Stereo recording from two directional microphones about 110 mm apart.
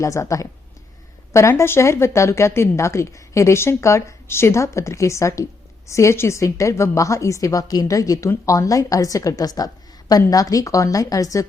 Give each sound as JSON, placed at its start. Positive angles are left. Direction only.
{"t": 0.0, "sound": "a woman's voice", "side_deg": 30}